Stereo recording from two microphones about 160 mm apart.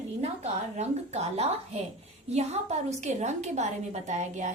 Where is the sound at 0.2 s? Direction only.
45° right (ahead or behind).